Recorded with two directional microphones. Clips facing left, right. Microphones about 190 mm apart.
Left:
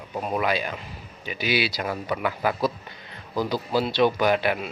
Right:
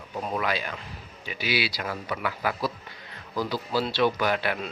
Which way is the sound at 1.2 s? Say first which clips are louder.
Left 3 dB; 20° left (ahead or behind).